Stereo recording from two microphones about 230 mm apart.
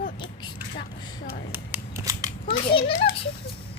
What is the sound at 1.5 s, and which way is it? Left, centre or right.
Scissors, centre.